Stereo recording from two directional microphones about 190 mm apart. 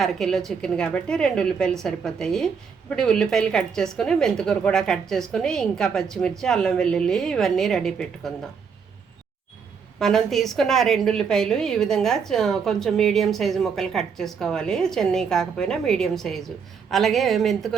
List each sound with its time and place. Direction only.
0.0 s a woman's voice: centre (ahead or behind)
10.0 s a woman's voice: centre (ahead or behind)